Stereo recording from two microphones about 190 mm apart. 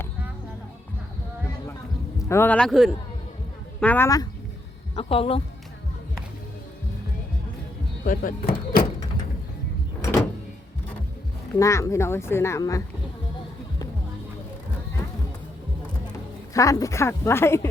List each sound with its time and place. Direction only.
2.3 s a man's voice: 10° left (ahead or behind)
4.9 s a woman's voice: 30° left (ahead or behind)
8.0 s speech: 45° left (ahead or behind)
11.5 s a woman's voice: 15° left (ahead or behind)
16.6 s a woman's voice: 15° left (ahead or behind)